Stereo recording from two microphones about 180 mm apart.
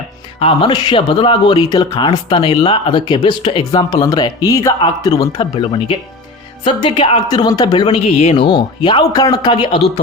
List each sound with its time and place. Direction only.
0.3 s speech: 30° left (ahead or behind)